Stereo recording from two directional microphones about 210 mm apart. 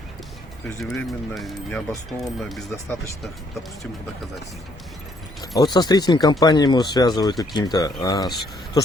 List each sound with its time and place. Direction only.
0.8 s speech: centre (ahead or behind)
5.4 s speech: 20° left (ahead or behind)